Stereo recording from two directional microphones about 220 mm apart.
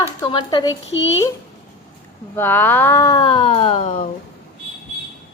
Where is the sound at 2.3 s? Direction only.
10° left (ahead or behind); by 4.1 s 25° left (ahead or behind).